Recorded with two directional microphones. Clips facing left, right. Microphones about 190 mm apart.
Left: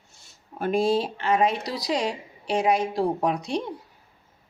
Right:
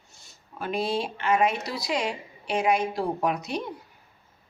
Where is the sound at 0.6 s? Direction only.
45° left (ahead or behind); by 3.7 s 30° left (ahead or behind).